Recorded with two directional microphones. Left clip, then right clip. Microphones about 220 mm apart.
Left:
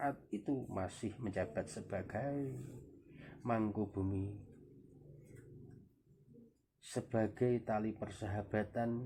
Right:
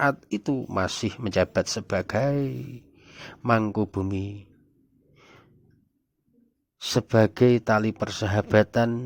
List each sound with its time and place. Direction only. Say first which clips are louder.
0.0 s speech: right 15 dB; 50° right (ahead or behind)
3.4 s speech: right 14 dB; 45° right (ahead or behind)
6.9 s speech: right 16 dB; 50° right (ahead or behind)